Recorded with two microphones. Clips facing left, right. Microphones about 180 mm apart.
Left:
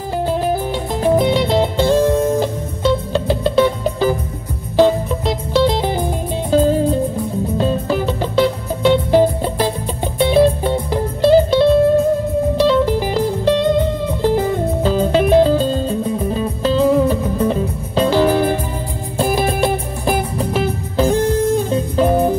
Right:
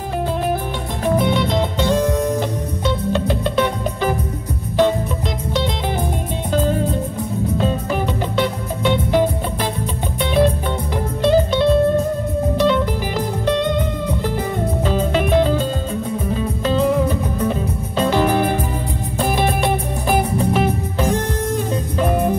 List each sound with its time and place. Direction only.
1.0 s music: 30° left (ahead or behind)
20.5 s music: 30° left (ahead or behind)